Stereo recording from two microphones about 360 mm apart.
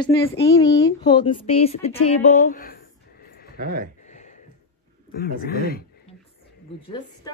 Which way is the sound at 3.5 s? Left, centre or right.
Right.